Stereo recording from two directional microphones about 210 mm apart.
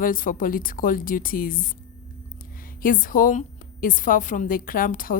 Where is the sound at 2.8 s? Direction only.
40° left (ahead or behind).